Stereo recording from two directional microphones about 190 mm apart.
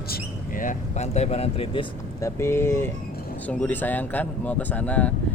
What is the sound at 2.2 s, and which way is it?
Speech, 15° left (ahead or behind).